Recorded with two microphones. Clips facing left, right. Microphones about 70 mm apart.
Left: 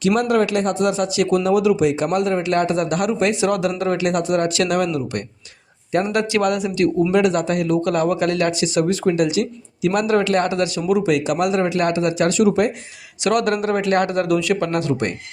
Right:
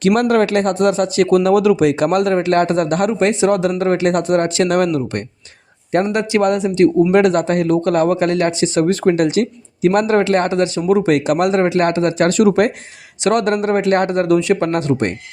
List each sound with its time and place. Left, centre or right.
0.0 s speech: right
2.4 s speech: right
4.5 s speech: right
4.8 s speech: right
6.1 s speech: right
7.1 s speech: right
13.2 s speech: right